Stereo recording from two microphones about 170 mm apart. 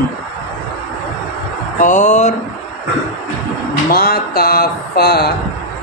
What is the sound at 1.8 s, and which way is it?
Speech, 45° left (ahead or behind).